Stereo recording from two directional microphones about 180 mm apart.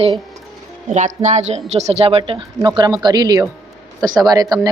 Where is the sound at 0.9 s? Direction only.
40° right (ahead or behind).